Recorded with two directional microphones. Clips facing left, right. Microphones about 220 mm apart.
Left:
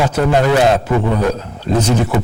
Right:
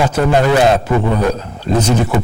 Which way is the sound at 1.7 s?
5° left (ahead or behind).